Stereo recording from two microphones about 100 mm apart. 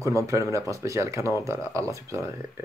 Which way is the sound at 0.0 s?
30° right (ahead or behind).